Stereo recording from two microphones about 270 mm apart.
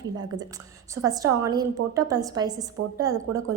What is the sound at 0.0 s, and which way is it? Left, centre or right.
A woman's voice, centre.